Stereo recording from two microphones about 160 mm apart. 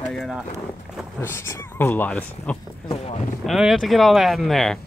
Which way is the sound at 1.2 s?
15° left (ahead or behind).